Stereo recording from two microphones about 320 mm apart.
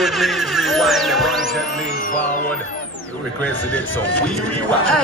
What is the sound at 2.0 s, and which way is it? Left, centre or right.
Music, left.